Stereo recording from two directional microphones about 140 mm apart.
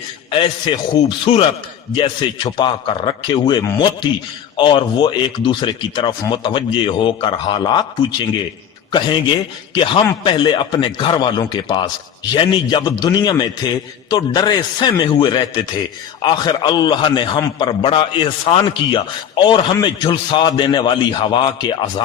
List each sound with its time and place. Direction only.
0.3 s a man's voice: 35° left (ahead or behind)
8.9 s a man's voice: 35° left (ahead or behind)